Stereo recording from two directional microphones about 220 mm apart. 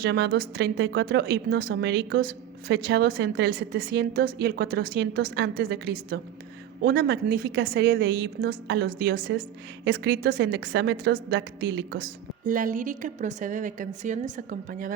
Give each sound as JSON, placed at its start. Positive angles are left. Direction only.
{"t": 0.0, "sound": "a woman's voice", "side_deg": -45}
{"t": 12.5, "sound": "a woman's voice", "side_deg": -40}